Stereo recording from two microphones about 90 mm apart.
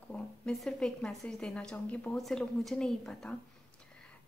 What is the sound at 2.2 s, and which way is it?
A woman's voice, centre (ahead or behind).